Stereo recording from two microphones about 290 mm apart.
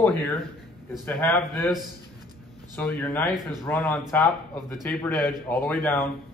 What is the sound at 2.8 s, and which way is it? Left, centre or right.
Speech, centre.